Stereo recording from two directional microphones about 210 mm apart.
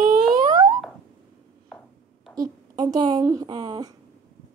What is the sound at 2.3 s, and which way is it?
Speech, 20° right (ahead or behind).